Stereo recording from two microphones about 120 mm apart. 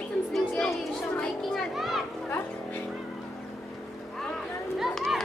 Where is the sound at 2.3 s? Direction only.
15° left (ahead or behind).